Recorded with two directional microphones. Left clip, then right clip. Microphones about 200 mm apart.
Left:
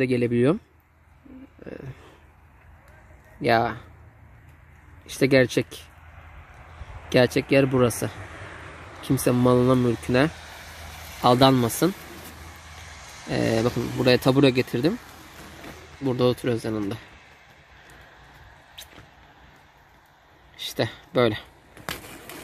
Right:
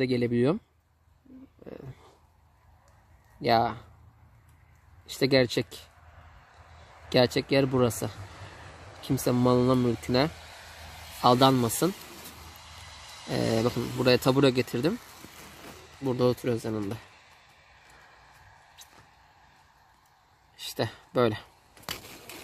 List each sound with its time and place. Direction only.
0.0 s speech: centre (ahead or behind)
1.6 s speech: centre (ahead or behind)
3.3 s speech: centre (ahead or behind)
5.0 s speech: centre (ahead or behind)
7.1 s speech: centre (ahead or behind)
8.3 s a sound: 60° right (ahead or behind)
9.0 s speech: centre (ahead or behind)
12.6 s vehicle: 35° left (ahead or behind)
13.3 s speech: 5° right (ahead or behind)
16.0 s speech: 5° right (ahead or behind)
20.5 s speech: 5° right (ahead or behind)
21.8 s a sound: 15° left (ahead or behind)